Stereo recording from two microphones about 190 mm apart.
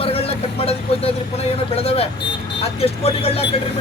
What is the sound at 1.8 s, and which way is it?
Speech, 30° left (ahead or behind).